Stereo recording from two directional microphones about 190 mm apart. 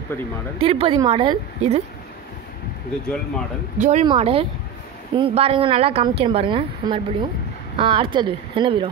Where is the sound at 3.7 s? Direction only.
40° right (ahead or behind).